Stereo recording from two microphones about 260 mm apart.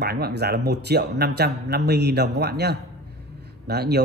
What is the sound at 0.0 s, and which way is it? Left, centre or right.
Speech, right.